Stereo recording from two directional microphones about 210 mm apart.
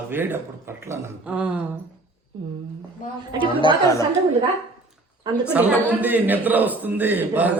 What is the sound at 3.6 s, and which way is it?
Speech, 25° left (ahead or behind).